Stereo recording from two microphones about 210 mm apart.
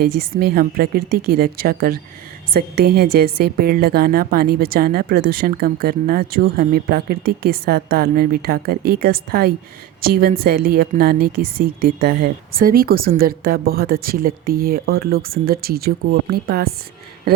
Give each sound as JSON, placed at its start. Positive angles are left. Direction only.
{"t": 0.0, "sound": "a woman's voice", "side_deg": -45}